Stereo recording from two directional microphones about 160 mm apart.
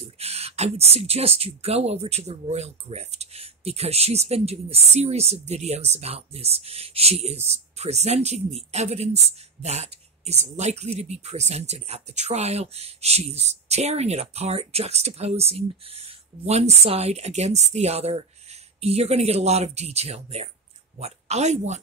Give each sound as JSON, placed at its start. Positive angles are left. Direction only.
{"t": 0.0, "sound": "speech", "side_deg": -40}